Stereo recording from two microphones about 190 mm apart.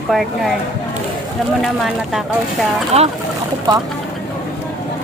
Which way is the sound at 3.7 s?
20° right (ahead or behind).